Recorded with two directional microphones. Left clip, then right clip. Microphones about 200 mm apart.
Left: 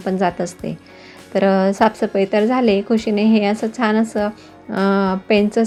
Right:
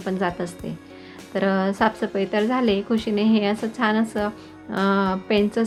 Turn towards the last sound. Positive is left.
turn(degrees=20)  # may be behind; listen again after turning